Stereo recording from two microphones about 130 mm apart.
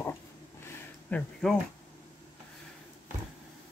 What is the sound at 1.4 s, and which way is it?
Speech, 5° left (ahead or behind).